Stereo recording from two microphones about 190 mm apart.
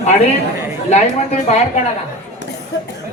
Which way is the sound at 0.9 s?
35° left (ahead or behind).